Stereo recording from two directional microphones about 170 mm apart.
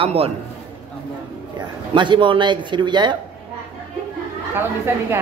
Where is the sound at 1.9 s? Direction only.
30° right (ahead or behind).